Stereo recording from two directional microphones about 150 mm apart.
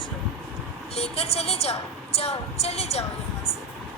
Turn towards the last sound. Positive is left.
turn(degrees=45)  # may be behind; listen again after turning